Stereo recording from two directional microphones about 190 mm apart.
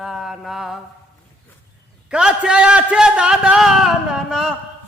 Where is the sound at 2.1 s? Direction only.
5° right (ahead or behind).